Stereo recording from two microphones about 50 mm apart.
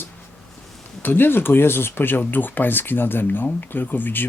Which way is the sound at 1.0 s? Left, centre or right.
Left.